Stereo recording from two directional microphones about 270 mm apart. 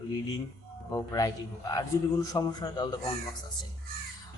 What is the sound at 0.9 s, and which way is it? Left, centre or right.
Speech, centre.